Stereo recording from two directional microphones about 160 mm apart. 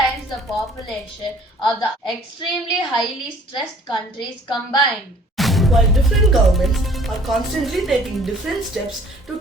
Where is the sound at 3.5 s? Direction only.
30° left (ahead or behind).